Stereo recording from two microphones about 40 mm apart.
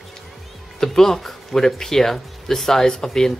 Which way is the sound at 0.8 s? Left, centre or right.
Centre.